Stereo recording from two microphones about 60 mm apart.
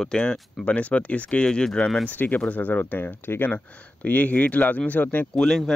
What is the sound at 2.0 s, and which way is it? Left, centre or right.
Speech, left.